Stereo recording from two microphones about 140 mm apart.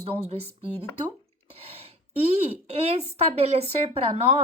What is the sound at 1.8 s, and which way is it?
Speech, 45° right (ahead or behind).